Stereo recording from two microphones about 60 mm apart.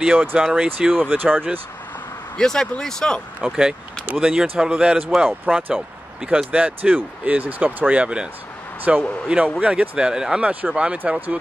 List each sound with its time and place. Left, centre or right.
0.0 s a man's voice: right
1.0 s speech: right
2.3 s speech: centre
3.3 s a man's voice: centre
5.3 s a man's voice: right
10.5 s speech: right